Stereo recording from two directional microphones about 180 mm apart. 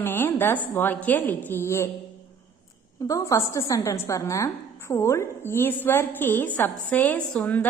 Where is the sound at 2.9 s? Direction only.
20° left (ahead or behind).